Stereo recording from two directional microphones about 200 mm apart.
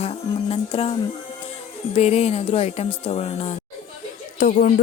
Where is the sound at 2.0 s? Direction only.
30° left (ahead or behind).